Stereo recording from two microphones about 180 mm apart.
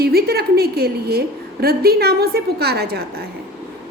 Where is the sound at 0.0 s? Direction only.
60° right (ahead or behind).